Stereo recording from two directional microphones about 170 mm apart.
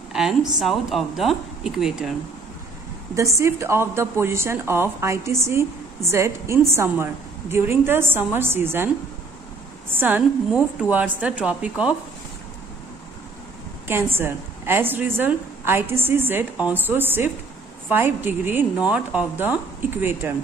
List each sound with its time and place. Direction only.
0.1 s a sound: 5° right (ahead or behind)
0.6 s speech: centre (ahead or behind)
3.2 s a woman's voice: 15° right (ahead or behind)
14.1 s a woman's voice: 15° right (ahead or behind)